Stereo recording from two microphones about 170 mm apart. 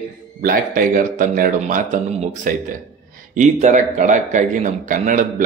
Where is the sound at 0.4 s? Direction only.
55° right (ahead or behind).